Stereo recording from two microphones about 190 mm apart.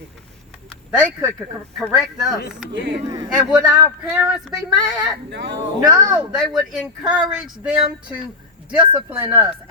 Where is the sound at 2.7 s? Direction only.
70° right (ahead or behind).